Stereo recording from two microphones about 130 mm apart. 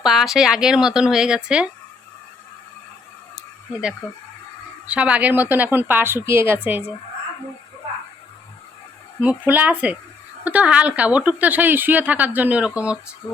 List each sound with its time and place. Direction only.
0.0 s speech: centre (ahead or behind)
3.3 s a sound: 5° right (ahead or behind)
4.9 s speech: 10° right (ahead or behind)
9.2 s speech: 15° right (ahead or behind)
13.2 s speech: 30° left (ahead or behind)